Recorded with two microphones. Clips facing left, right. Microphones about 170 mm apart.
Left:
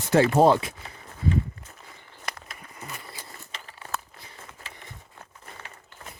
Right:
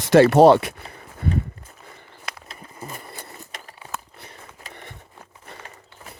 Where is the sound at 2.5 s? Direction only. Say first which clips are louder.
Right 4 dB; 30° right (ahead or behind).